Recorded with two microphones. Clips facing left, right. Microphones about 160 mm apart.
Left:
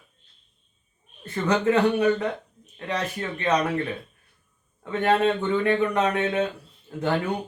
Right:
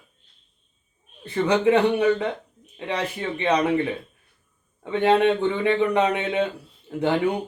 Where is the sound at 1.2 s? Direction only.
15° right (ahead or behind).